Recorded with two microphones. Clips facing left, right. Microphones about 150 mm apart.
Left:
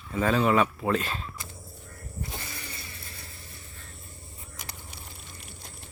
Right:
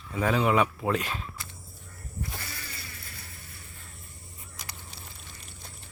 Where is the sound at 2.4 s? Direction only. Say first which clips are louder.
Left 1 dB; 25° left (ahead or behind).